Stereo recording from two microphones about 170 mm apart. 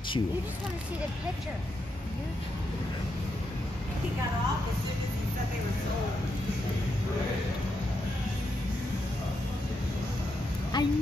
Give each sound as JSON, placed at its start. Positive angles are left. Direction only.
{"t": 10.7, "sound": "speech", "side_deg": 25}